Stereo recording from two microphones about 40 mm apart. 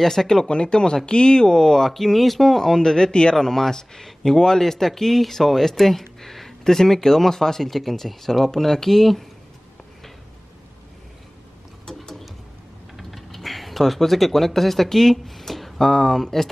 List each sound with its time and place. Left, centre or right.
0.0 s speech: centre
11.8 s mechanisms: centre
12.9 s a sound: centre
15.8 s speech: centre